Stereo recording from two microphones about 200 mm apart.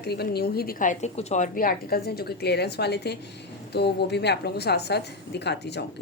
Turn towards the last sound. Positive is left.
turn(degrees=55)  # may be behind; listen again after turning